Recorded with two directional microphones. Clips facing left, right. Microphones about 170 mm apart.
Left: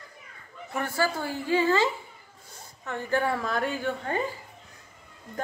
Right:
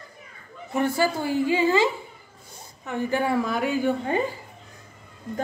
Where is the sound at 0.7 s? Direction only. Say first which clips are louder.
Right 5 dB; 15° right (ahead or behind).